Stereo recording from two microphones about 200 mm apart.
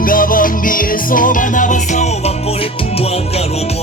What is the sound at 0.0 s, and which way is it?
Music, 45° left (ahead or behind).